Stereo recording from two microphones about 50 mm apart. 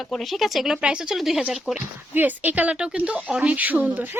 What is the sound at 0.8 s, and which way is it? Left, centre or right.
Speech, centre.